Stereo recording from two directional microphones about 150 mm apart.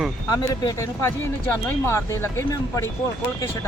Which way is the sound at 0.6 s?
20° left (ahead or behind).